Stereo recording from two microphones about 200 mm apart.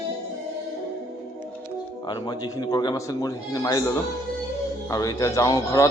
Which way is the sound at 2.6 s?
20° left (ahead or behind).